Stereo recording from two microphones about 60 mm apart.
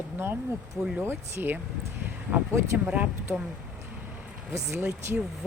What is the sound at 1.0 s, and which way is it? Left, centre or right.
Speech, right.